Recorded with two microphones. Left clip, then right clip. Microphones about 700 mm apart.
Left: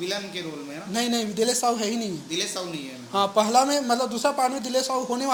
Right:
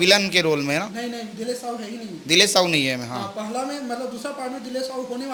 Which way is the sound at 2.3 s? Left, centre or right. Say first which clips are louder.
Right 15 dB; right.